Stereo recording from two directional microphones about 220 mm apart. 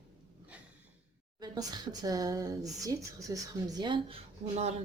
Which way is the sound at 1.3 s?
20° right (ahead or behind).